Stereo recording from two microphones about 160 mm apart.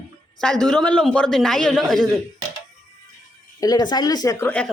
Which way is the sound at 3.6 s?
25° left (ahead or behind).